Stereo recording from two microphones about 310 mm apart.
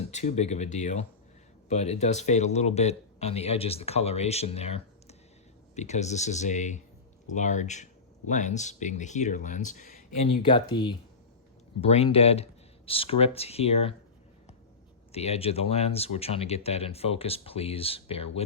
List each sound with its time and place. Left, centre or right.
0.1 s speech: left
10.4 s speech: centre
15.1 s speech: centre